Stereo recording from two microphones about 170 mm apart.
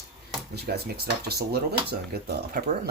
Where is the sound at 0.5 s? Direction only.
70° right (ahead or behind).